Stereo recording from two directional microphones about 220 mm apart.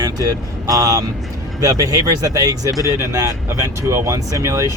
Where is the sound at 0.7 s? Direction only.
15° right (ahead or behind).